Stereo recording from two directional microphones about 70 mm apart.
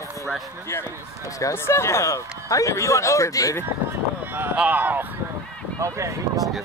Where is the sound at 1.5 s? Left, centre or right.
Left.